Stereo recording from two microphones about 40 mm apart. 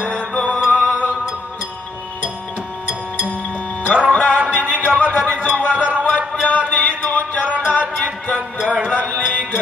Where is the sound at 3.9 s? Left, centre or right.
Centre.